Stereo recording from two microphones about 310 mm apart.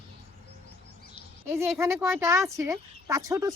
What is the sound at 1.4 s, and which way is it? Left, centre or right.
Speech, centre.